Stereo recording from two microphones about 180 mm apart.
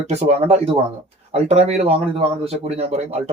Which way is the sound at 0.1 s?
35° right (ahead or behind).